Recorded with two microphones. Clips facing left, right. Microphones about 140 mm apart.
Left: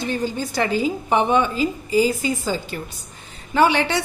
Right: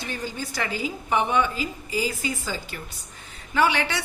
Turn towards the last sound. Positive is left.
turn(degrees=30)  # may be behind; listen again after turning